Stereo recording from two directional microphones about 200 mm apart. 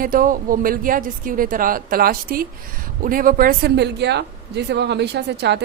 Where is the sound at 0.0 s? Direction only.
45° right (ahead or behind).